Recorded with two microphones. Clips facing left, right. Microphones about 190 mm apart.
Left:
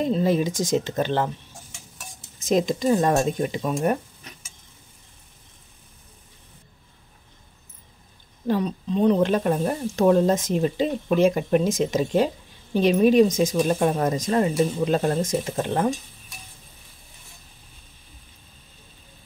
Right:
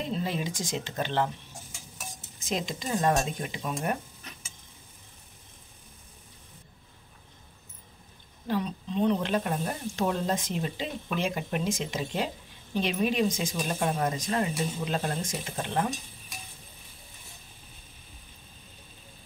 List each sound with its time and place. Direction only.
0.0 s speech: 45° left (ahead or behind)
2.4 s speech: 45° left (ahead or behind)
8.5 s speech: 40° left (ahead or behind)